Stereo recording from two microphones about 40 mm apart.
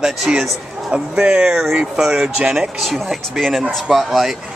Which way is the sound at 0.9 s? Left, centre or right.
Right.